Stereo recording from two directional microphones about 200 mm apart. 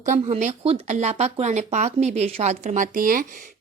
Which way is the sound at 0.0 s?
40° right (ahead or behind).